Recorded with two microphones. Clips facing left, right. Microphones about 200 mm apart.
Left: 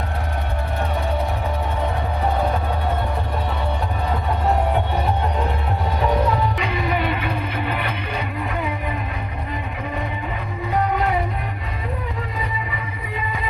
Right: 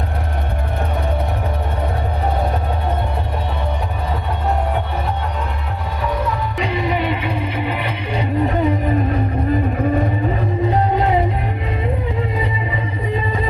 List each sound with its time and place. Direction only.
6.6 s music: 25° right (ahead or behind); by 10.3 s 45° right (ahead or behind)
10.7 s music: 30° right (ahead or behind)
12.4 s music: 30° right (ahead or behind)